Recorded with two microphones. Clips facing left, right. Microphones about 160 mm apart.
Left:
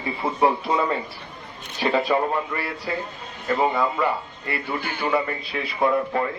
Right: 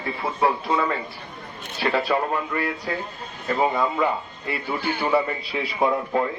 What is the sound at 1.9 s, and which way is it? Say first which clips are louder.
Speech: left 2 dB; 15° left (ahead or behind).